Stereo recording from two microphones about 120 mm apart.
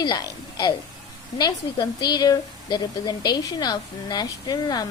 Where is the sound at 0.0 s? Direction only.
35° left (ahead or behind).